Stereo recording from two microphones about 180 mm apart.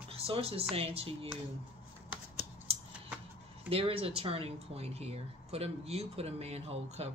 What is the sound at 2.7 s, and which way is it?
Scissors, 35° right (ahead or behind).